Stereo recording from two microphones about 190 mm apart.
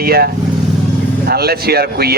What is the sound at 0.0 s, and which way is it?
Speech, 55° right (ahead or behind).